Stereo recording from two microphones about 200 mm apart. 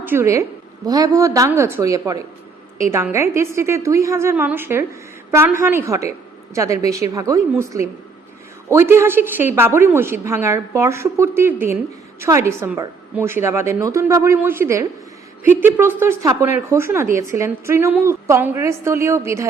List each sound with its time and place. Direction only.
0.0 s a woman's voice: 10° right (ahead or behind)